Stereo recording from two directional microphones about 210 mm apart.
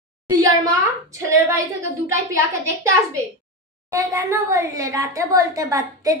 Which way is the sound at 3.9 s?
15° right (ahead or behind).